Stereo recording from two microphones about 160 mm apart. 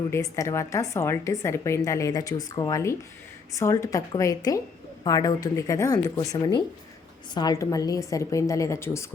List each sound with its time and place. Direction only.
0.1 s speech: 20° left (ahead or behind)